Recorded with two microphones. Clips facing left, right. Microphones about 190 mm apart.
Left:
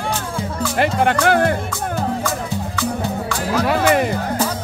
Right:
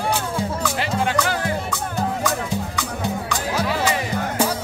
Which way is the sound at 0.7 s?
55° left (ahead or behind).